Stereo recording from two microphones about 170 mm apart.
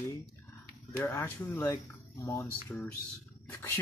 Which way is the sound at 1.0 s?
10° left (ahead or behind).